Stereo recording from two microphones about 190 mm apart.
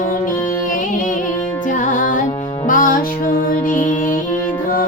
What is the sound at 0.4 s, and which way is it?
Music, 45° left (ahead or behind).